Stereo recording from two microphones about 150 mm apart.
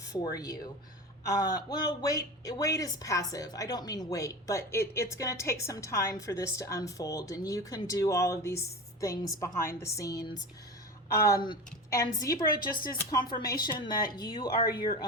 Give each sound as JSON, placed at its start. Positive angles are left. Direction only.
{"t": 0.1, "sound": "a woman's voice", "side_deg": 25}
{"t": 13.3, "sound": "a woman's voice", "side_deg": 25}